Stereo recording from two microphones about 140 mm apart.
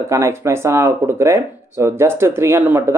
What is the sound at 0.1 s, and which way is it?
Speech, 20° right (ahead or behind).